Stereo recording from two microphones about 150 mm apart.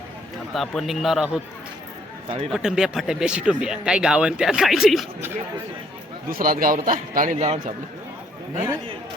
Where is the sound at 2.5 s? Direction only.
5° right (ahead or behind).